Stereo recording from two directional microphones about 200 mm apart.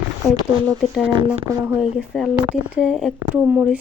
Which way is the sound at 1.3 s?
10° right (ahead or behind).